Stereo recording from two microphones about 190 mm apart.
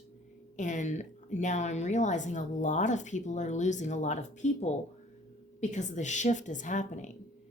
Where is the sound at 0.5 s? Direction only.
40° left (ahead or behind).